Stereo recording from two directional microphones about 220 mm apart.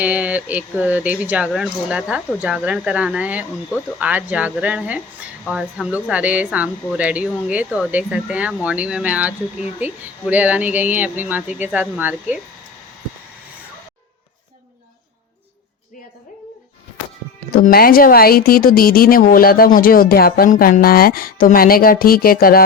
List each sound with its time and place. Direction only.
0.0 s speech: 5° right (ahead or behind)
17.5 s a woman's voice: 40° left (ahead or behind)